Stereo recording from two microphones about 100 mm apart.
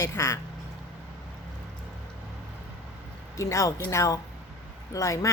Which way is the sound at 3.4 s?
30° left (ahead or behind).